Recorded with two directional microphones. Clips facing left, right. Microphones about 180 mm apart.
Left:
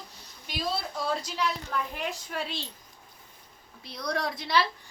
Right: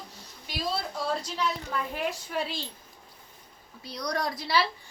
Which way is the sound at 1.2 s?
Centre (ahead or behind).